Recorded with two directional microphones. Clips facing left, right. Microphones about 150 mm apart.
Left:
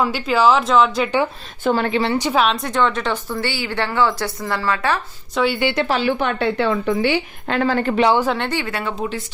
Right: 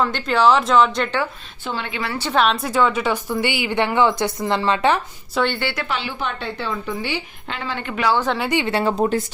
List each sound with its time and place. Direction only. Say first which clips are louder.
0.0 s speech: left 1 dB; 5° left (ahead or behind)
1.6 s a woman's voice: left 9 dB; 45° left (ahead or behind)
2.1 s a woman's voice: left 3 dB; 15° left (ahead or behind)
2.4 s a woman's voice: right 4 dB; centre (ahead or behind); by 4.9 s 20° right (ahead or behind)
5.3 s speech: left 2 dB; centre (ahead or behind)
5.5 s a woman's voice: left 6 dB; 15° left (ahead or behind)
5.8 s a woman's voice: left 8 dB; 40° left (ahead or behind)
6.1 s a woman's voice: left 7 dB; 65° left (ahead or behind); by 8.0 s 40° left (ahead or behind)
8.0 s a woman's voice: left 2 dB; 15° left (ahead or behind)
8.4 s speech: right 3 dB; 20° right (ahead or behind)
8.7 s speech: right 6 dB; 35° right (ahead or behind)